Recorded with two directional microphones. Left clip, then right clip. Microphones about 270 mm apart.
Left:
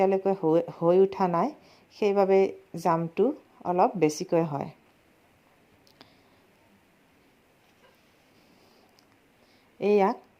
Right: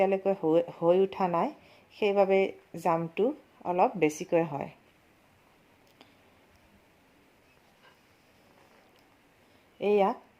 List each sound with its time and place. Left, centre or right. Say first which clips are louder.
0.0 s speech: left 2 dB; left
9.8 s speech: left 2 dB; left